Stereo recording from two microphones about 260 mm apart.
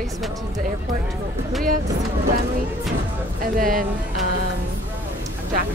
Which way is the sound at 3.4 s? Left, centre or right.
Right.